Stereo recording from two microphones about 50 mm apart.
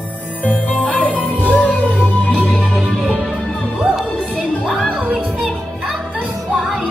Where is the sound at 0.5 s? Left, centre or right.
Left.